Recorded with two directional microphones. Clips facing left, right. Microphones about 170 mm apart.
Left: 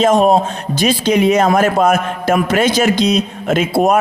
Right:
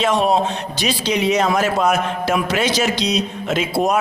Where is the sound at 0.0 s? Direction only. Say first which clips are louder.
Left 5 dB; 45° left (ahead or behind).